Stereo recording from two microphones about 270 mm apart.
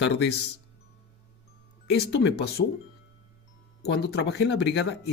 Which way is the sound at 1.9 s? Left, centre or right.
Left.